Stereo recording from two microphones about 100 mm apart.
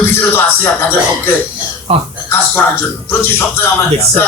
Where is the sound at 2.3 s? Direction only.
20° left (ahead or behind).